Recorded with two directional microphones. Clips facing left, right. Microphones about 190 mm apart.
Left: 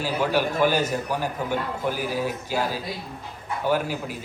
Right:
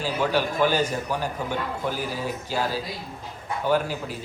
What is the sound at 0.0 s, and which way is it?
A man's voice, 10° left (ahead or behind).